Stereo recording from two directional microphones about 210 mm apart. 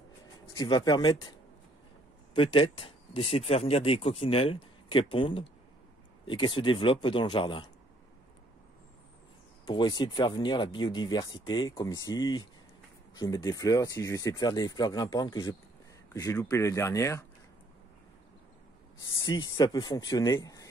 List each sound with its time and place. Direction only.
0.6 s speech: 20° left (ahead or behind)
2.3 s speech: 25° left (ahead or behind)
9.7 s speech: 20° left (ahead or behind)
19.2 s speech: 20° left (ahead or behind)